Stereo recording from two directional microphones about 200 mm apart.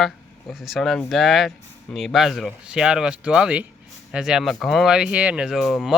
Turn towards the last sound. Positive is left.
turn(degrees=0)  # may be behind; listen again after turning